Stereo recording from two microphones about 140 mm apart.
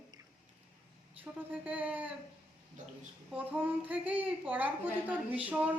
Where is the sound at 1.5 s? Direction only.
10° right (ahead or behind).